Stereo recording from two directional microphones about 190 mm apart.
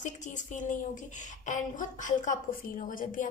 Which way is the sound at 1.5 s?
40° left (ahead or behind).